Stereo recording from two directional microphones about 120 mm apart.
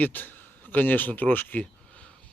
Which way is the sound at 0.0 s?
15° left (ahead or behind).